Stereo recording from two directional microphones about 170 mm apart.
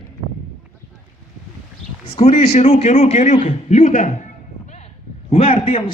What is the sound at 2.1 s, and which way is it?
A man's voice, 35° left (ahead or behind).